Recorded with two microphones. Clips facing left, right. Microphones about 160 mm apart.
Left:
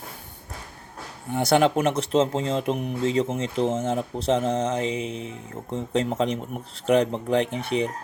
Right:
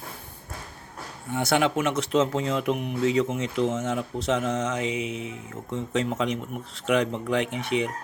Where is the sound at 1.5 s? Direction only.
35° left (ahead or behind).